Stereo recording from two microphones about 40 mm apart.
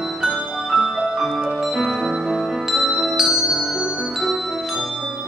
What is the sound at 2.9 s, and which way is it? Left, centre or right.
Glockenspiel, centre.